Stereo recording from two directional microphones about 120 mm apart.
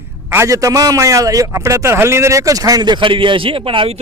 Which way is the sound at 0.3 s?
25° right (ahead or behind).